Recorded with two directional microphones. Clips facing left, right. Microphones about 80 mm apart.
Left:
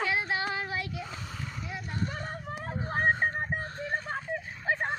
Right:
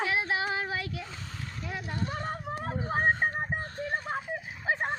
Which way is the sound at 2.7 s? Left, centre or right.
Centre.